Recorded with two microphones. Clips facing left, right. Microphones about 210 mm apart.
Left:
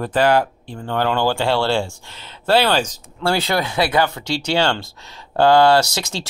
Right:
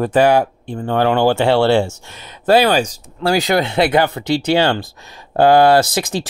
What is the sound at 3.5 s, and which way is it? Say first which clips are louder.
Speech: right 4 dB; 25° right (ahead or behind).